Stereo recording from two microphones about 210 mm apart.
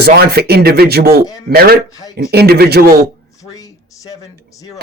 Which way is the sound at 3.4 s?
15° left (ahead or behind).